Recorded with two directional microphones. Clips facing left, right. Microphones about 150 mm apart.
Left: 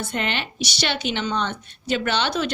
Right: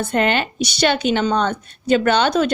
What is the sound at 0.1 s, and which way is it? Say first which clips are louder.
A woman's voice: right 9 dB; 45° right (ahead or behind).